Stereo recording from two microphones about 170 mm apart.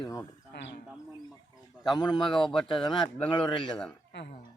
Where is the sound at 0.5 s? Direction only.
90° left.